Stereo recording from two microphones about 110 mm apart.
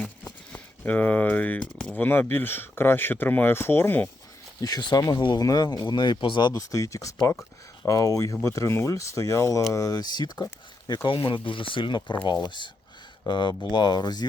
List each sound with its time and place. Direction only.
0.5 s speech: 15° left (ahead or behind)
4.6 s speech: 35° left (ahead or behind)
6.6 s speech: 30° left (ahead or behind)
11.1 s speech: 55° left (ahead or behind)